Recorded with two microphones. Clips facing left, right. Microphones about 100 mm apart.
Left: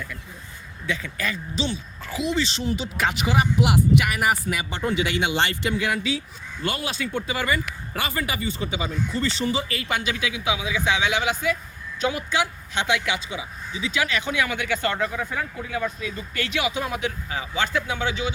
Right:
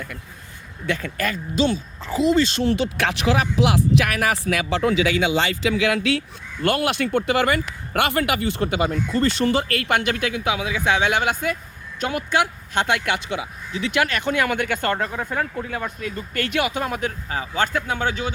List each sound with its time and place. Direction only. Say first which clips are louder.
0.9 s speech: right 4 dB; 50° right (ahead or behind)
2.0 s speech: right 7 dB; 35° right (ahead or behind)
2.6 s speech: right 4 dB; 80° right; by 18.3 s 50° right (ahead or behind)